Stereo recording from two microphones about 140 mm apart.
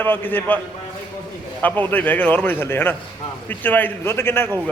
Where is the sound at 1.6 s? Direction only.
10° left (ahead or behind).